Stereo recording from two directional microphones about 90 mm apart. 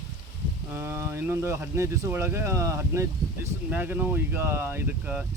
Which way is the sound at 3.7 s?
20° right (ahead or behind).